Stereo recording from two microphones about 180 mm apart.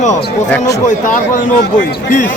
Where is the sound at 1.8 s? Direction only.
45° left (ahead or behind).